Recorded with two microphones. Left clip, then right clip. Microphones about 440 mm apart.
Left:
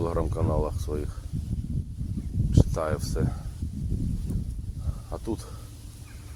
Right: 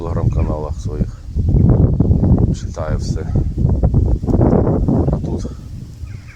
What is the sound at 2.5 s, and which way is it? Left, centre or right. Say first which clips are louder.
Speech: right 3 dB; left.